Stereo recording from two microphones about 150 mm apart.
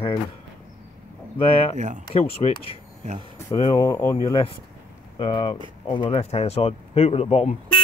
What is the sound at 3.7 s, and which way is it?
Speech, 25° left (ahead or behind).